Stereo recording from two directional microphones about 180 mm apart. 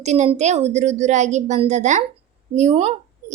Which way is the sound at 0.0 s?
40° right (ahead or behind).